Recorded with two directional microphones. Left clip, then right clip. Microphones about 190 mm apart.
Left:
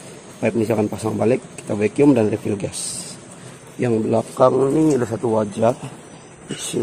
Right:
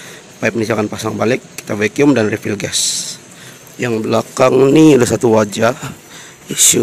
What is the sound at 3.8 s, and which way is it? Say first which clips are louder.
Speech: right 3 dB; 5° left (ahead or behind).